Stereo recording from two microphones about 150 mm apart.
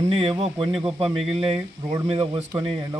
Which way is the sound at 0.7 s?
5° right (ahead or behind).